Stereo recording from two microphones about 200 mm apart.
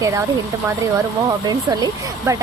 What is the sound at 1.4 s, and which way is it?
Speech, 20° right (ahead or behind).